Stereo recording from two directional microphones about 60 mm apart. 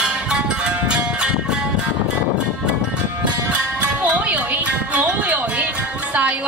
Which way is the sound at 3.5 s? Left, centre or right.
Right.